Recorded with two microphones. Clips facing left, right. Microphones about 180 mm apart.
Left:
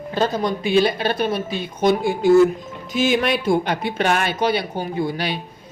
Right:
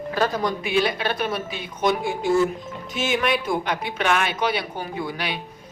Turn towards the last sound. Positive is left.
turn(degrees=35)  # may be behind; listen again after turning